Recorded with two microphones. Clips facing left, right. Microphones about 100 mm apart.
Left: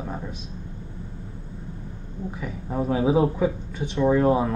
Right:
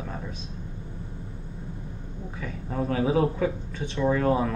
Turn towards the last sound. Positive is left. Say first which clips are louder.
# left 4 dB
turn(degrees=15)  # may be behind; listen again after turning